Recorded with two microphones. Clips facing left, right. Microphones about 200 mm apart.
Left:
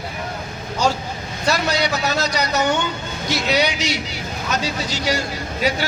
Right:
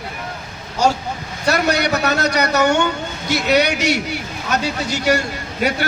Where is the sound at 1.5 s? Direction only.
60° right (ahead or behind).